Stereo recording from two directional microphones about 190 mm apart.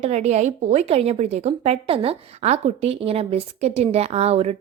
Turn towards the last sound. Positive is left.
turn(degrees=-35)  # may be behind; listen again after turning